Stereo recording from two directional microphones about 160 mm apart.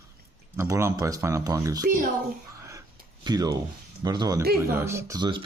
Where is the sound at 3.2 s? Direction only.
25° right (ahead or behind).